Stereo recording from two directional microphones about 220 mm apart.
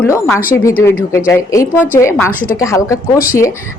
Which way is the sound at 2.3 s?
40° left (ahead or behind).